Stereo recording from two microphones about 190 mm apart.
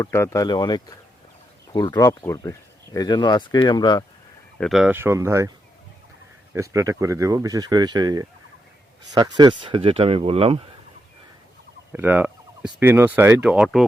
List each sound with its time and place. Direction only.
0.0 s speech: 15° left (ahead or behind)
4.5 s speech: centre (ahead or behind); by 5.5 s 15° right (ahead or behind)
6.5 s speech: 15° right (ahead or behind); by 10.6 s 30° right (ahead or behind)
11.9 s speech: 10° right (ahead or behind)